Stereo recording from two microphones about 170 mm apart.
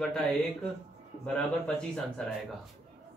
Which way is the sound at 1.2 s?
5° left (ahead or behind).